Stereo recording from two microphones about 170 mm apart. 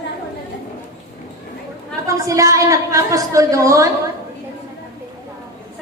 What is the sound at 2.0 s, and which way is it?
A woman's voice, 20° right (ahead or behind).